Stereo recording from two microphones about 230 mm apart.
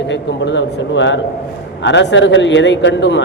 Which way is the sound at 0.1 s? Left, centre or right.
Left.